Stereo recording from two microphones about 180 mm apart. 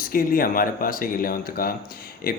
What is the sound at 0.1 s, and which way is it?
Speech, 55° left (ahead or behind).